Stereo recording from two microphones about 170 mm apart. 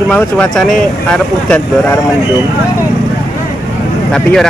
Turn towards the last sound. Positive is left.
turn(degrees=5)  # may be behind; listen again after turning